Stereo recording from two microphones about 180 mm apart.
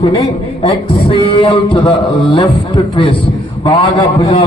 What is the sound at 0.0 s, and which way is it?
A man's voice, 35° left (ahead or behind).